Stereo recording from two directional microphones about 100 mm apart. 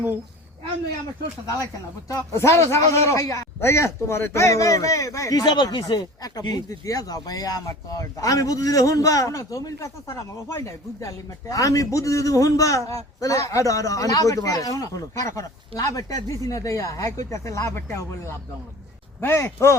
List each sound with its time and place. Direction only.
2.0 s a man's voice: 30° left (ahead or behind)
19.2 s speech: 25° left (ahead or behind)